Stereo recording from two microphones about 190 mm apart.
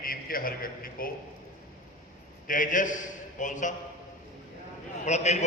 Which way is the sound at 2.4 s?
45° left (ahead or behind).